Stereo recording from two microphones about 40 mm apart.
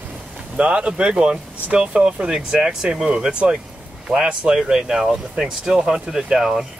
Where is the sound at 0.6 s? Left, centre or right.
Right; by 6.6 s centre.